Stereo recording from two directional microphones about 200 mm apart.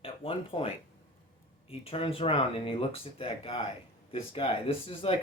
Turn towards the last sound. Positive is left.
turn(degrees=25)  # may be behind; listen again after turning